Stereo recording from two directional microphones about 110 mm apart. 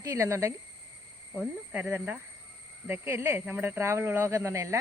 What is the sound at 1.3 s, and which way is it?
Speech, 15° right (ahead or behind).